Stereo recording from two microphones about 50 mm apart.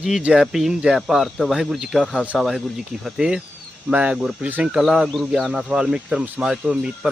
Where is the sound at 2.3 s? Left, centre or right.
Centre.